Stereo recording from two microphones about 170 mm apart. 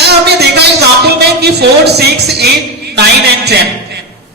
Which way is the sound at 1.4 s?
75° right (ahead or behind).